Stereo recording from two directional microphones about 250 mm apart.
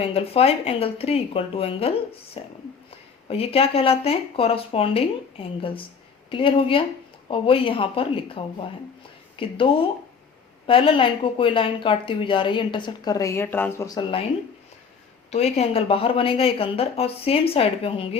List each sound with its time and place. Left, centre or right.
0.0 s speech: left
10.7 s speech: left
15.3 s speech: left